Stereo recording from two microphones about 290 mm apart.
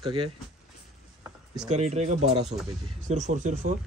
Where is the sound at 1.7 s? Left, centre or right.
Right.